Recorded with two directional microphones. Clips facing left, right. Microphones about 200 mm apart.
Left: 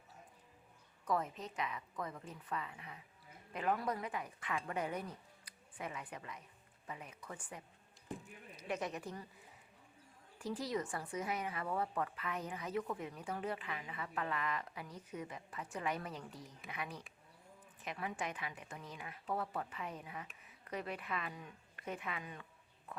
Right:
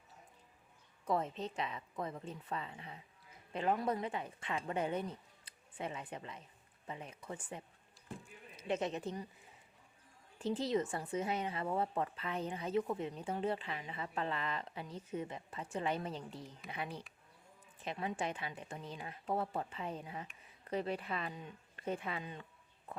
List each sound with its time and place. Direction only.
1.0 s a woman's voice: 25° right (ahead or behind)
10.3 s a woman's voice: 25° right (ahead or behind)